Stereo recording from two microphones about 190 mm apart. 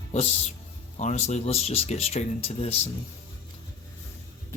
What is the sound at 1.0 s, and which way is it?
Speech, 35° left (ahead or behind).